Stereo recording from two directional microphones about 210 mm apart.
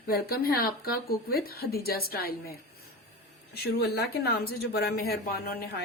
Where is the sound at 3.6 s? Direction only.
50° left (ahead or behind).